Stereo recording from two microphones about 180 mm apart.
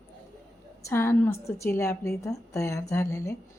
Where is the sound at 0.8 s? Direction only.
15° left (ahead or behind).